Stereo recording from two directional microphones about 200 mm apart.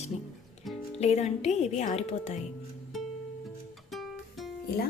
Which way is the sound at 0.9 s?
30° left (ahead or behind).